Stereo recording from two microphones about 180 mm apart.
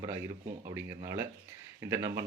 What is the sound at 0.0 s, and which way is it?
Speech, 15° right (ahead or behind).